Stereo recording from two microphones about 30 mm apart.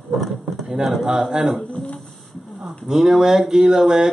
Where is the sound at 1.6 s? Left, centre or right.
Left.